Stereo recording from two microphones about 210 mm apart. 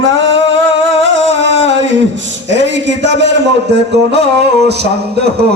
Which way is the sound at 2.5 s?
60° right (ahead or behind).